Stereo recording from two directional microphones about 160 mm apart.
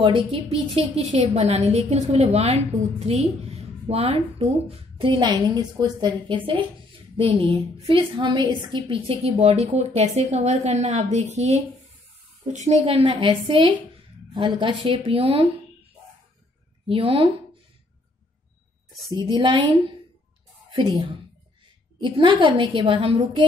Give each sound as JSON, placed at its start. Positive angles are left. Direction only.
{"t": 0.0, "sound": "a woman's voice", "side_deg": -35}
{"t": 12.9, "sound": "a woman's voice", "side_deg": -30}
{"t": 16.8, "sound": "speech", "side_deg": -35}
{"t": 19.1, "sound": "a woman's voice", "side_deg": -30}
{"t": 20.7, "sound": "speech", "side_deg": -25}
{"t": 22.0, "sound": "speech", "side_deg": -30}